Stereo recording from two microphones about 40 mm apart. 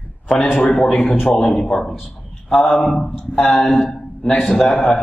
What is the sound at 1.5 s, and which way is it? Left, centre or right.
Speech, left.